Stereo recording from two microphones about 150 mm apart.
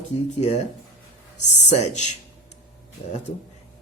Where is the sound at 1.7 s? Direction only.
50° left (ahead or behind).